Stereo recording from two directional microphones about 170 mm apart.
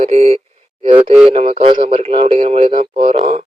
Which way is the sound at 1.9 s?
35° right (ahead or behind).